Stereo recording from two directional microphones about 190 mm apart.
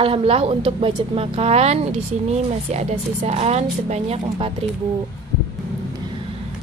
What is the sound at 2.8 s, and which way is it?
Speech, 35° right (ahead or behind).